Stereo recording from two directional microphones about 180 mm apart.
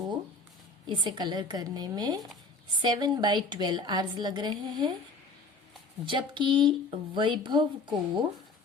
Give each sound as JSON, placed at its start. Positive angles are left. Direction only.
{"t": 0.9, "sound": "a woman's voice", "side_deg": -25}
{"t": 6.1, "sound": "a woman's voice", "side_deg": -25}